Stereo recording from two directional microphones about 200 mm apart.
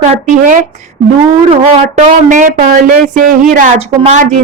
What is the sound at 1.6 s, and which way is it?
Speech, 40° right (ahead or behind).